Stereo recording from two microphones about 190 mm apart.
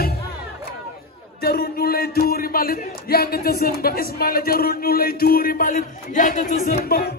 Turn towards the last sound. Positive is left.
turn(degrees=45)  # may be behind; listen again after turning